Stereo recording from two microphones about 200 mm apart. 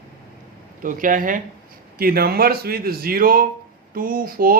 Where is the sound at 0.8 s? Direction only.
40° right (ahead or behind).